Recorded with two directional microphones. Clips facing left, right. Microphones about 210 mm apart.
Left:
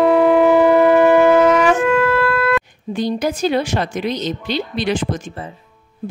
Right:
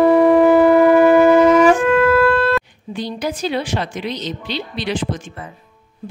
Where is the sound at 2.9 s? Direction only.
45° left (ahead or behind).